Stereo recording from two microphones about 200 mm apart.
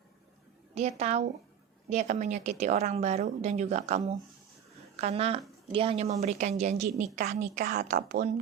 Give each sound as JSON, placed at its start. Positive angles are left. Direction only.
{"t": 0.7, "sound": "a woman's voice", "side_deg": -30}